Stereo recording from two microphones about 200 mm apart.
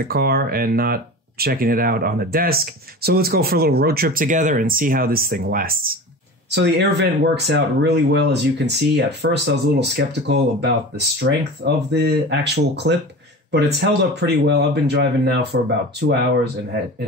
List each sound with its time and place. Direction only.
0.1 s speech: 50° right (ahead or behind)
6.5 s speech: 55° right (ahead or behind)